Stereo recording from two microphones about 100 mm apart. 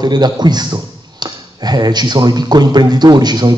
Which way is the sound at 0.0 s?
45° right (ahead or behind).